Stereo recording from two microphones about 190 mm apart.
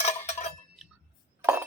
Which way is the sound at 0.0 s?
35° left (ahead or behind).